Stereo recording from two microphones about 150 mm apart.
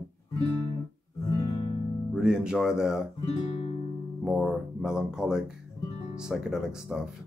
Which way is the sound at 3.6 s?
45° left (ahead or behind).